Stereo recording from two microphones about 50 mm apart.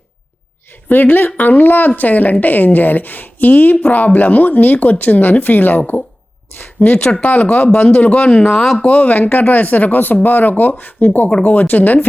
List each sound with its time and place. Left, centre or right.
0.9 s a woman's voice: left
11.3 s speech: left
11.5 s speech: left